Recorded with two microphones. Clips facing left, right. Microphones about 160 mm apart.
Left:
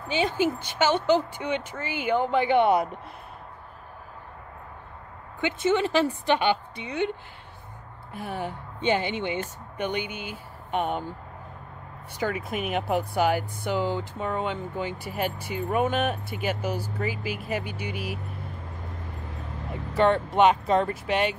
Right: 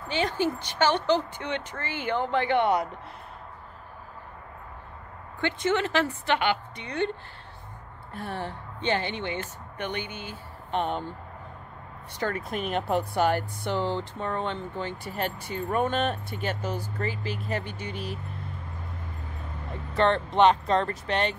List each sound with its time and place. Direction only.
0.1 s speech: 10° left (ahead or behind)
5.4 s speech: 10° left (ahead or behind)
8.1 s speech: 10° left (ahead or behind)
12.2 s speech: 10° left (ahead or behind)
20.0 s speech: 10° left (ahead or behind)